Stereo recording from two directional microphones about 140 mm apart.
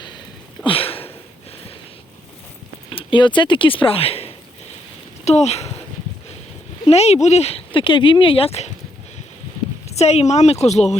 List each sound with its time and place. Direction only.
0.6 s sniff: 40° left (ahead or behind)
2.9 s speech: 35° left (ahead or behind)
6.8 s speech: 50° left (ahead or behind)
9.9 s speech: 50° left (ahead or behind)